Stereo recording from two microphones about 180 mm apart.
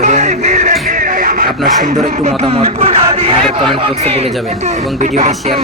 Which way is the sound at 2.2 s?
35° right (ahead or behind).